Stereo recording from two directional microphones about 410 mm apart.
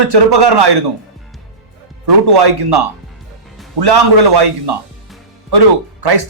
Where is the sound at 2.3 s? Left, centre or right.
Right.